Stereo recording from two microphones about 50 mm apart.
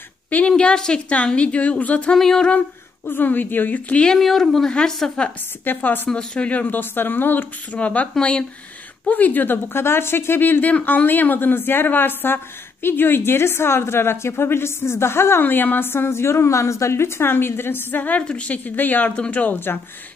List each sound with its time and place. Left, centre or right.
0.5 s a woman's voice: centre
2.1 s humming: centre
3.1 s a woman's voice: left
4.2 s speech: centre
5.2 s humming: centre
5.7 s a woman's voice: left
6.0 s a woman's voice: centre; by 7.4 s left
7.7 s a woman's voice: left
9.0 s a woman's voice: left
10.6 s a woman's voice: left
15.4 s a woman's voice: left
18.2 s a woman's voice: centre
18.5 s a woman's voice: left
19.7 s a woman's voice: left